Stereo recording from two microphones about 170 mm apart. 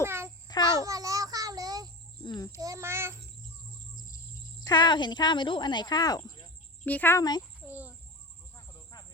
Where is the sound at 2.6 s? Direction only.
20° right (ahead or behind).